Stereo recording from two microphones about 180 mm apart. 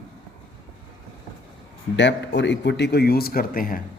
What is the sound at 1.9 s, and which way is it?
Speech, 80° left.